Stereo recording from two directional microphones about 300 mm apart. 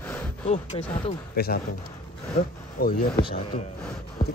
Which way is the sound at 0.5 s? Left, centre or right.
Centre.